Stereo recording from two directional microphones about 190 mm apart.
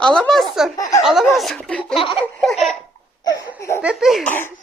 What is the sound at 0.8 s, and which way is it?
Speech, 15° left (ahead or behind).